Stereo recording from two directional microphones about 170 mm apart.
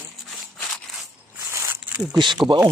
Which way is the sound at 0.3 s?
Centre (ahead or behind).